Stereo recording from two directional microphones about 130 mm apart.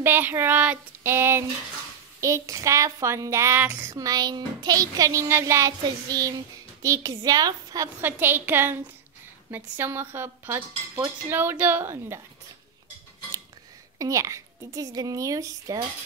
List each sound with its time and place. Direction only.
0.0 s speech: 15° right (ahead or behind)
13.9 s speech: 25° right (ahead or behind)